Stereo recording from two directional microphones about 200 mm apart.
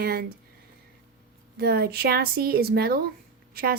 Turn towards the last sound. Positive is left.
turn(degrees=-50)  # may be behind; listen again after turning